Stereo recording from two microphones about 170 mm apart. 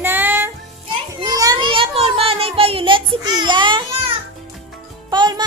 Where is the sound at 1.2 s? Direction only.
20° right (ahead or behind).